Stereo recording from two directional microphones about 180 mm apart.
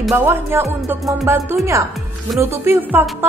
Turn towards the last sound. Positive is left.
turn(degrees=-10)  # may be behind; listen again after turning